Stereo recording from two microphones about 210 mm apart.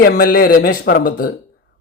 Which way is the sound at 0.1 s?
45° left (ahead or behind).